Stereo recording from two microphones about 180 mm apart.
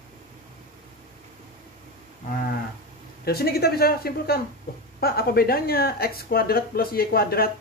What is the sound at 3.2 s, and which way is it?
Speech, 60° left (ahead or behind).